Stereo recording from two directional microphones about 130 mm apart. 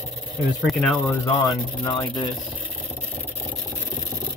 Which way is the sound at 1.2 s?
25° left (ahead or behind).